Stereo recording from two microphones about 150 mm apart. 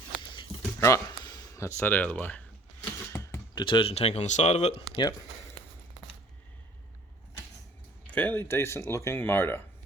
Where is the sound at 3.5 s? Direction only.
30° left (ahead or behind).